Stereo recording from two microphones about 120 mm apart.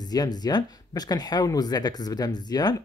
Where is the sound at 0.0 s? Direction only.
35° left (ahead or behind).